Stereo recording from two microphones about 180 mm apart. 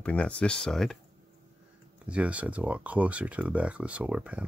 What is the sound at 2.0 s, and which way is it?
Speech, 5° right (ahead or behind).